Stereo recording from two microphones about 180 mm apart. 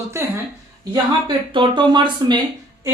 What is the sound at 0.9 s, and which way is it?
Speech, 25° right (ahead or behind).